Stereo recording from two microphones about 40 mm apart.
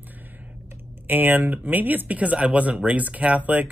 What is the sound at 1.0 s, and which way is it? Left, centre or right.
Speech, right.